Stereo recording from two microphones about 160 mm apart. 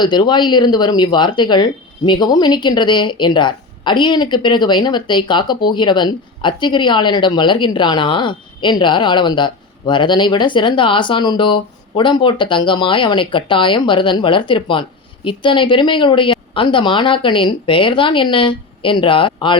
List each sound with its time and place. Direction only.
0.0 s speech: 30° left (ahead or behind)